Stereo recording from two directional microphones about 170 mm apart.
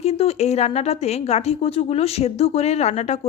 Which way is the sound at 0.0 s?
35° left (ahead or behind).